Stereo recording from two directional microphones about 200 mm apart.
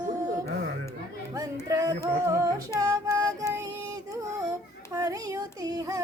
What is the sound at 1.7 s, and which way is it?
Singing, 20° right (ahead or behind).